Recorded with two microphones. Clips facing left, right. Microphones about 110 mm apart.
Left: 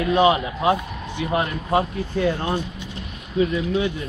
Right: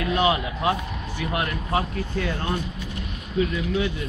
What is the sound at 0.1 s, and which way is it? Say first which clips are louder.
Speech: left 5 dB; 25° left (ahead or behind).